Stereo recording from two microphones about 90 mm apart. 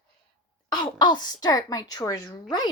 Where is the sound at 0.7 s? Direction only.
55° left (ahead or behind).